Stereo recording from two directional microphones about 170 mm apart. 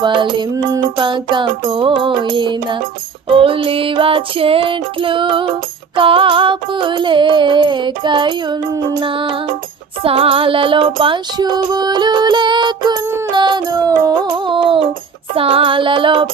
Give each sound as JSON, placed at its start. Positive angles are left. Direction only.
{"t": 0.0, "sound": "music", "side_deg": -30}
{"t": 13.1, "sound": "music", "side_deg": -15}
{"t": 13.3, "sound": "music", "side_deg": -25}